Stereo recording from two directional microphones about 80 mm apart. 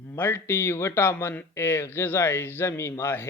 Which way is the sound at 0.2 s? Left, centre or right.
Left.